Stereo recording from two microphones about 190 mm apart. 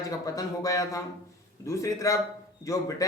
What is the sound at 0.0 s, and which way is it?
Speech, 15° left (ahead or behind).